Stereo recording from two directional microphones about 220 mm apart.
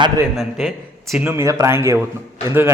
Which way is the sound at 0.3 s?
Centre (ahead or behind).